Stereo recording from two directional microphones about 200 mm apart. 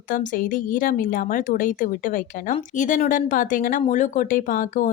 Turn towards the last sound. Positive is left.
turn(degrees=45)  # may be behind; listen again after turning